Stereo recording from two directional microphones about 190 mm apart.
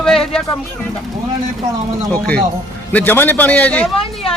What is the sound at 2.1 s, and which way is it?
Speech, 5° left (ahead or behind).